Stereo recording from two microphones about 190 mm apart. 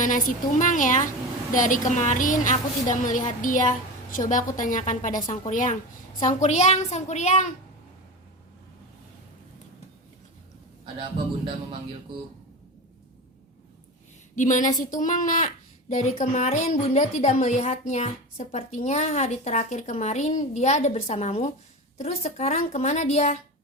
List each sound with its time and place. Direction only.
0.0 s a woman's voice: 45° left (ahead or behind)
14.3 s a woman's voice: 40° left (ahead or behind)